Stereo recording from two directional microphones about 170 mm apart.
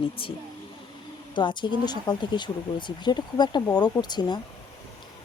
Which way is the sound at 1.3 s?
25° left (ahead or behind).